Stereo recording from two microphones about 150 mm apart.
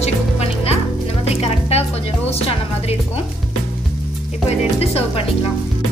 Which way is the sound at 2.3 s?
40° left (ahead or behind).